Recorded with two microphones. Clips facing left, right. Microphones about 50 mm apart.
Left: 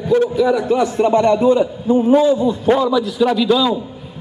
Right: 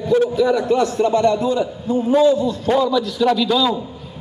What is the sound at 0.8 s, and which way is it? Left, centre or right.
A man's voice, left.